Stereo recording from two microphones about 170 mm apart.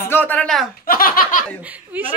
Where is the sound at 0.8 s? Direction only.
55° left (ahead or behind).